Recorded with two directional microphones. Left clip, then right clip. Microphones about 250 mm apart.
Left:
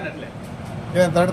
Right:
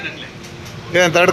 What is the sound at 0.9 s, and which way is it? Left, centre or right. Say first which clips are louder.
Speech: right 5 dB; right.